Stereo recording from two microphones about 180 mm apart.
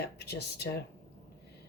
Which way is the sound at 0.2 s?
65° left (ahead or behind).